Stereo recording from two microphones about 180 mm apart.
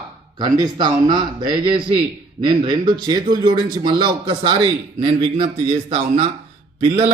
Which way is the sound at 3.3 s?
25° right (ahead or behind).